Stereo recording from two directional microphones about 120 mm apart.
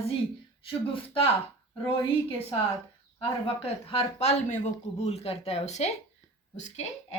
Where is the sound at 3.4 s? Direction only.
50° left (ahead or behind).